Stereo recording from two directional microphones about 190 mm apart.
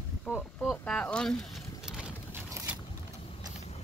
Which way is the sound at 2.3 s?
10° right (ahead or behind).